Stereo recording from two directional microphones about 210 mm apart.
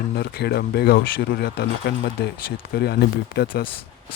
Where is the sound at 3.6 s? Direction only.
25° left (ahead or behind).